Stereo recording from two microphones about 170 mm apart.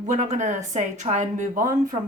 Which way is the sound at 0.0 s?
45° right (ahead or behind).